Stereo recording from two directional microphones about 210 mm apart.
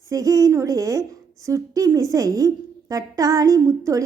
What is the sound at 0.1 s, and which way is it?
A woman's voice, 15° right (ahead or behind).